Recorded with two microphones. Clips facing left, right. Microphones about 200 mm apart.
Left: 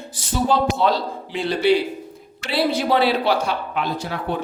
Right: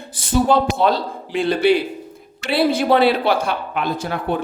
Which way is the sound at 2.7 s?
50° right (ahead or behind).